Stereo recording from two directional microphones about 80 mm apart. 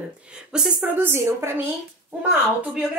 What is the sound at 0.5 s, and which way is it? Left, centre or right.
Speech, centre.